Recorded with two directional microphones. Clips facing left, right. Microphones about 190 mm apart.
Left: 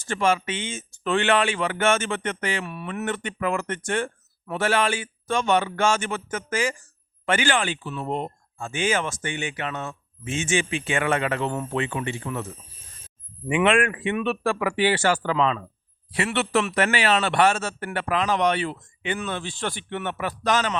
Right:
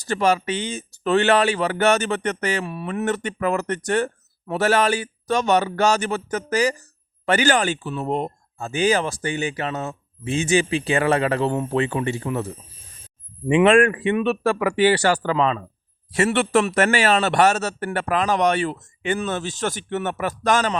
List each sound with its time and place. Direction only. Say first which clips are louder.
0.0 s speech: right 3 dB; 40° right (ahead or behind)
13.7 s a man's voice: right 5 dB; 40° right (ahead or behind)